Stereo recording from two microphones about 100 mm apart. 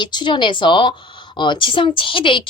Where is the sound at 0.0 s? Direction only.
50° left (ahead or behind).